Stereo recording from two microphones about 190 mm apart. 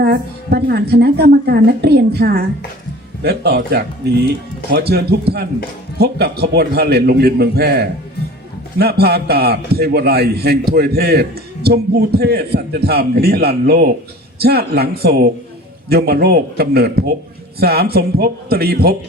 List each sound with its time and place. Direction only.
0.0 s a man's voice: 55° right (ahead or behind)